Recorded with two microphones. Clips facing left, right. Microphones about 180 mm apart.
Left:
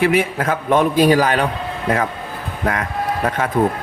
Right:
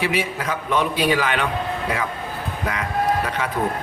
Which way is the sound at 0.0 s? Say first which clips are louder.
Left 7 dB; 50° left (ahead or behind).